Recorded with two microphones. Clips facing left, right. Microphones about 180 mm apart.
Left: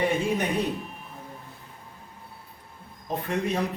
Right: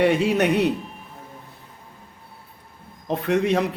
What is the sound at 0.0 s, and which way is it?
Speech, 75° right (ahead or behind).